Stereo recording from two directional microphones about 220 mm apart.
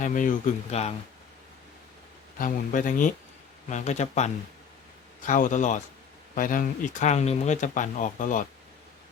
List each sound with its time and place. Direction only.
0.0 s speech: 35° left (ahead or behind)
2.4 s speech: 35° left (ahead or behind)